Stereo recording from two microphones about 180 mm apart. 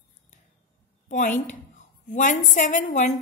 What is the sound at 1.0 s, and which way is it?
A woman's voice, 45° left (ahead or behind).